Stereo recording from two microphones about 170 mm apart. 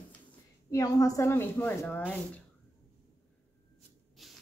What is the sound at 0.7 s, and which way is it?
A woman's voice, 20° left (ahead or behind).